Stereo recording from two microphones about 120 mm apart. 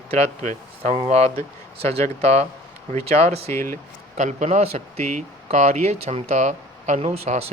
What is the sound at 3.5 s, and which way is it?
Speech, 20° left (ahead or behind).